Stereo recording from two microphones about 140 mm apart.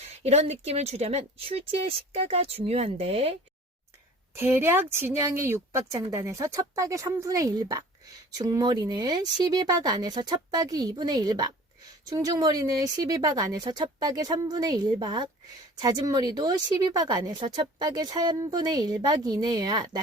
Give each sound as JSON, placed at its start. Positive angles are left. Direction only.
{"t": 0.0, "sound": "speech", "side_deg": -50}
{"t": 4.4, "sound": "a woman's voice", "side_deg": -15}